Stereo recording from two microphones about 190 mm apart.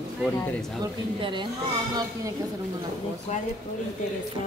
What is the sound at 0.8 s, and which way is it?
Speech, 25° right (ahead or behind).